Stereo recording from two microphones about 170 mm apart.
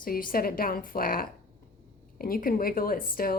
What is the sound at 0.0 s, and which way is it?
A woman's voice, 55° left (ahead or behind).